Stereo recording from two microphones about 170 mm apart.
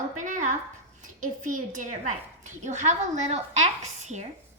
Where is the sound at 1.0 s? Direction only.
50° right (ahead or behind).